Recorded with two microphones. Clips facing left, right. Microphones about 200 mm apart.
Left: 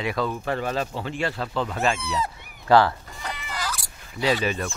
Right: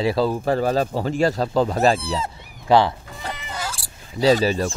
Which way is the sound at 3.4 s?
25° right (ahead or behind).